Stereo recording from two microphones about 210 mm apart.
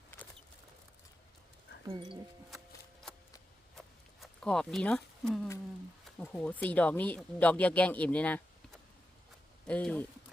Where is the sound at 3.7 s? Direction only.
Centre (ahead or behind).